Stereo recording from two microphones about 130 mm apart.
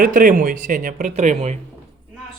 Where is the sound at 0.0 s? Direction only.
90° right; by 1.5 s 65° right (ahead or behind).